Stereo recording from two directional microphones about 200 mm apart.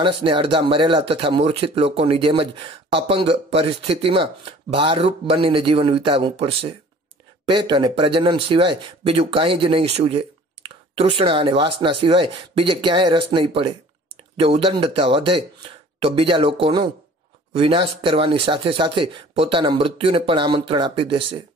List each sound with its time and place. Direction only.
0.0 s speech: 25° right (ahead or behind)